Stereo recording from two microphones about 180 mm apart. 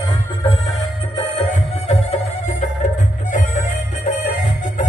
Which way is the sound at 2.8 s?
45° left (ahead or behind).